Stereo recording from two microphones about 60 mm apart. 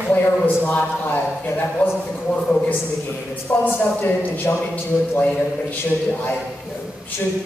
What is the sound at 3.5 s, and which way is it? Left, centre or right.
Speech, left.